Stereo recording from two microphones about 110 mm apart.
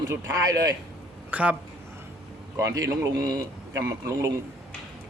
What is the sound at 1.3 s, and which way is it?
Speech, 15° right (ahead or behind).